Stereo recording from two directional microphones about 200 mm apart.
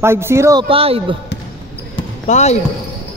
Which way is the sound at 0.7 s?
30° right (ahead or behind).